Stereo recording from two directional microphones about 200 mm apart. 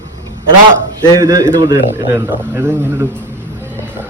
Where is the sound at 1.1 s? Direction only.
15° right (ahead or behind).